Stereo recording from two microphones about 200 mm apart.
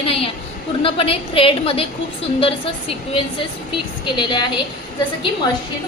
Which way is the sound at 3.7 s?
25° left (ahead or behind).